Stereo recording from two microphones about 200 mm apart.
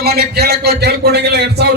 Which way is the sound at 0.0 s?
50° right (ahead or behind).